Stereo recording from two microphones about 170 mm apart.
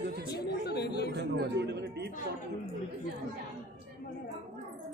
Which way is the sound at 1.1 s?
85° right.